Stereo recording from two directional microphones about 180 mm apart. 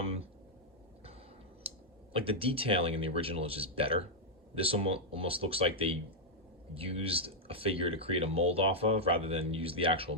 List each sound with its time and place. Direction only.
2.1 s speech: 30° right (ahead or behind)